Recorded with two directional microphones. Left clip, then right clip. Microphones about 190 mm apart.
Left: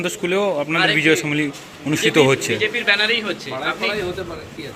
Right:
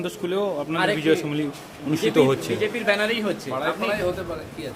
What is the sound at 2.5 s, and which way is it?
Speech, 45° right (ahead or behind).